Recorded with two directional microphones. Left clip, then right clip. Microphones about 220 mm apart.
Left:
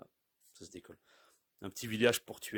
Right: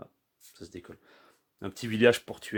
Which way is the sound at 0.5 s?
45° left (ahead or behind).